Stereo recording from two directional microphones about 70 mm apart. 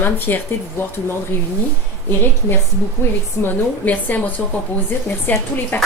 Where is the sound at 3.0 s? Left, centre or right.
Left.